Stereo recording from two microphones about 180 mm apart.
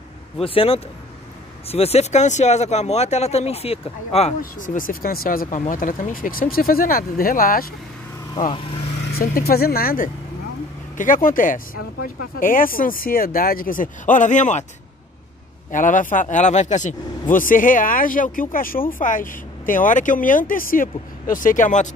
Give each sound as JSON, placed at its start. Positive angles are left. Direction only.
{"t": 0.4, "sound": "speech", "side_deg": 30}
{"t": 4.4, "sound": "speech", "side_deg": 45}
{"t": 9.1, "sound": "speech", "side_deg": 55}
{"t": 15.7, "sound": "speech", "side_deg": 45}